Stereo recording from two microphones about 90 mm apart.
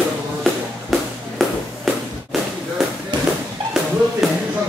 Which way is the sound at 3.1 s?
60° right (ahead or behind).